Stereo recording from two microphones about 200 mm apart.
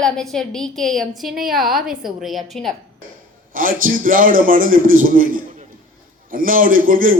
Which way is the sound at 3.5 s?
45° right (ahead or behind).